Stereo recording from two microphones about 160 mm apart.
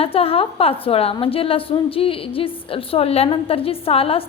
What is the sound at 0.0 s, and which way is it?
A woman's voice, 35° left (ahead or behind).